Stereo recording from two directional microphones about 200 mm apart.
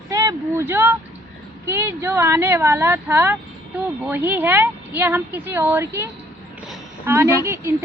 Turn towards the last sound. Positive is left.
turn(degrees=-15)  # may be behind; listen again after turning